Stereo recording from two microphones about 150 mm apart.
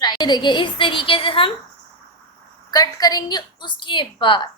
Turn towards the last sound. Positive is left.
turn(degrees=35)  # may be behind; listen again after turning